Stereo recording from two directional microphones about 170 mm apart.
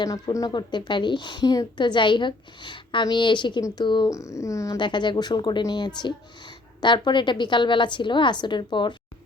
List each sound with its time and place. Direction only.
0.0 s a woman's voice: 20° left (ahead or behind)